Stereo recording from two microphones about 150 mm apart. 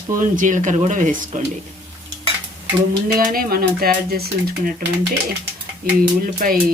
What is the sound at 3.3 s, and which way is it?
Speech, 75° right (ahead or behind).